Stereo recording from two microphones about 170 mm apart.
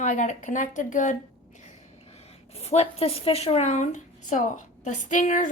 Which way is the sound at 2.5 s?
40° left (ahead or behind).